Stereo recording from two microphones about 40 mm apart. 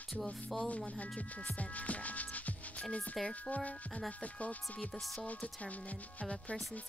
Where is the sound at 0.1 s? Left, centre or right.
Centre.